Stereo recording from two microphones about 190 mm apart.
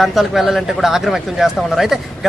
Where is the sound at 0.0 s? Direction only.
Centre (ahead or behind).